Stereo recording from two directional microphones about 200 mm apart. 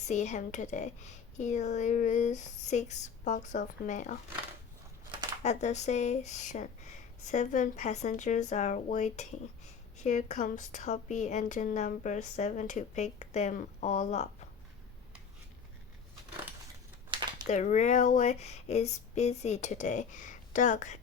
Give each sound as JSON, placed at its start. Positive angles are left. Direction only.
{"t": 0.1, "sound": "a woman's voice", "side_deg": 35}
{"t": 5.4, "sound": "a woman's voice", "side_deg": 35}
{"t": 17.1, "sound": "a sound", "side_deg": -20}
{"t": 17.5, "sound": "a woman's voice", "side_deg": 35}